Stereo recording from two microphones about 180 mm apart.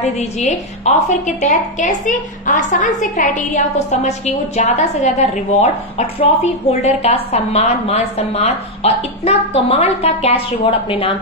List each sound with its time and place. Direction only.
0.0 s a woman's voice: 40° left (ahead or behind)